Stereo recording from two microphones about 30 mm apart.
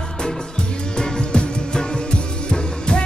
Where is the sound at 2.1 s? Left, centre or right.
Left.